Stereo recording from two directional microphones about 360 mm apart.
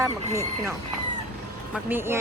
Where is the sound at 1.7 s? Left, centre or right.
Centre.